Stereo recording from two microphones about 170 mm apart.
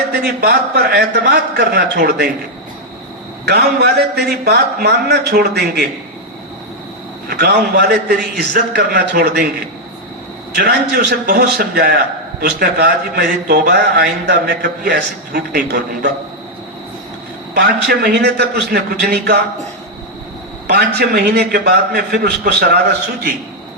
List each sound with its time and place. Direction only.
0.1 s a man's voice: 70° right (ahead or behind)
3.4 s a man's voice: 75° right (ahead or behind)
7.3 s a man's voice: 65° right (ahead or behind)
10.5 s a man's voice: 75° right (ahead or behind)
17.5 s a man's voice: 70° right (ahead or behind)
20.7 s a man's voice: 65° right (ahead or behind)